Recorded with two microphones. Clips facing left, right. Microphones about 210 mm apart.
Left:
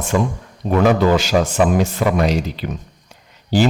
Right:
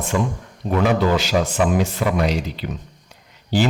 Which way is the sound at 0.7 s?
50° left (ahead or behind).